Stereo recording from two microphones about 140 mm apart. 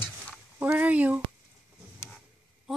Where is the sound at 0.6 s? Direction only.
10° right (ahead or behind).